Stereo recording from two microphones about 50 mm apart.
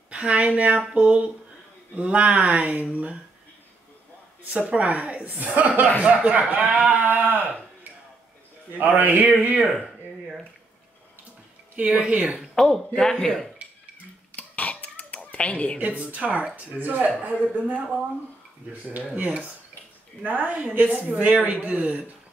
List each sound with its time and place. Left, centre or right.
0.1 s a woman's voice: right
4.6 s a woman's voice: right
8.7 s speech: right
11.7 s a woman's voice: right
12.5 s speech: centre
14.3 s a sound: left
15.3 s a woman's voice: left
16.0 s speech: right